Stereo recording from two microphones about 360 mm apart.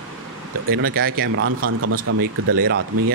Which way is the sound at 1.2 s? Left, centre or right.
Right.